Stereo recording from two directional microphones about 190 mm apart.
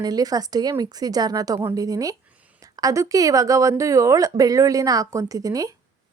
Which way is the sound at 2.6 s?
20° right (ahead or behind).